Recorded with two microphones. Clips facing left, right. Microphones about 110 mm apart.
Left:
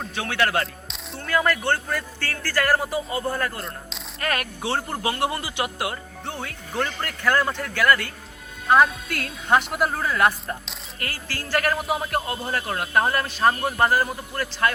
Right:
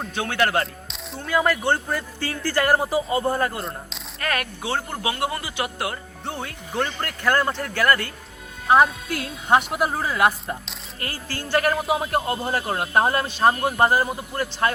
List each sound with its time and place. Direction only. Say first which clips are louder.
0.1 s a man's voice: right 1 dB; 25° right (ahead or behind)
0.9 s a man's voice: even; centre (ahead or behind); by 3.6 s 25° right (ahead or behind)
4.2 s speech: even; 25° left (ahead or behind)
6.2 s speech: right 2 dB; 5° right (ahead or behind)
9.1 s speech: right 2 dB; 10° right (ahead or behind)
11.0 s a man's voice: right 1 dB; 25° right (ahead or behind)